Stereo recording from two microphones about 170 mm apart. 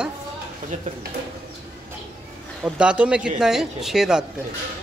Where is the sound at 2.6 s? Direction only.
5° right (ahead or behind).